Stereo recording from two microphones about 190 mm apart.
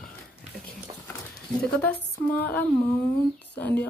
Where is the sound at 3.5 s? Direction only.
10° left (ahead or behind).